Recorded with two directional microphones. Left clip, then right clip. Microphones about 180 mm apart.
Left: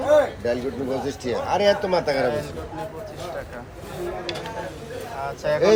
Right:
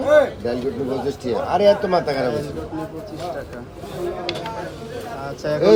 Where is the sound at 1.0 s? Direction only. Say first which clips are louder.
Right 3 dB; 50° right (ahead or behind).